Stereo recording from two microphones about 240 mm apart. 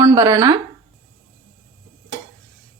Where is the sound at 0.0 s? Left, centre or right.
Centre.